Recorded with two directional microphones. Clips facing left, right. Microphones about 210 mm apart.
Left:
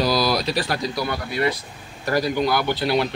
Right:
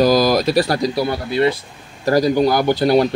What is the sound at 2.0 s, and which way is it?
Speech, 40° right (ahead or behind).